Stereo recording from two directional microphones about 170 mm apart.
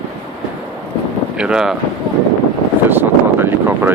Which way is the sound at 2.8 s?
10° right (ahead or behind).